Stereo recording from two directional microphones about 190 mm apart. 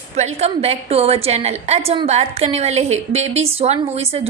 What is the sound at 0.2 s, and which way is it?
A woman's voice, 35° right (ahead or behind).